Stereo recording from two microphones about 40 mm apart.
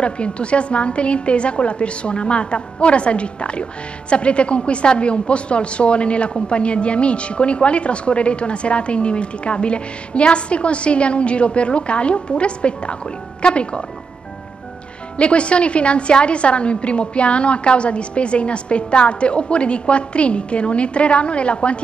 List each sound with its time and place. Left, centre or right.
0.0 s a woman's voice: left
15.1 s a woman's voice: left